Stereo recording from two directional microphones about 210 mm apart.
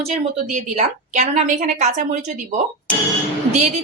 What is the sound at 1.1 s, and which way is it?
A woman's voice, 35° right (ahead or behind).